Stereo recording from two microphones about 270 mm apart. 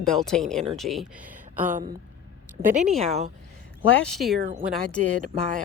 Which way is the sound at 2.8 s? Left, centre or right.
Centre.